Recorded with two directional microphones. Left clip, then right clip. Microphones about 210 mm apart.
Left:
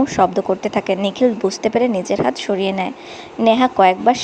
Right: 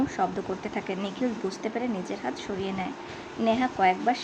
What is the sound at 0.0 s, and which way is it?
A woman's voice, 30° left (ahead or behind).